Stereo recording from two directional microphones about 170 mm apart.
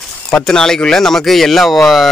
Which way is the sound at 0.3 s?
5° left (ahead or behind).